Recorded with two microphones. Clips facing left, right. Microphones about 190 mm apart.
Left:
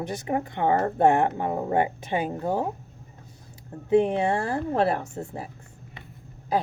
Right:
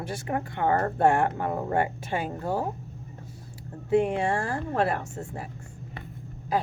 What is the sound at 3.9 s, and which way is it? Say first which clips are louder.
A woman's voice: left 3 dB; 20° left (ahead or behind).